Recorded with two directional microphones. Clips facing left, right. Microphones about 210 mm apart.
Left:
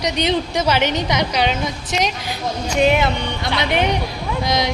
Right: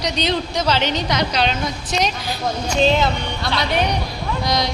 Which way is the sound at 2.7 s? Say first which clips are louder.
Left 1 dB; 15° left (ahead or behind).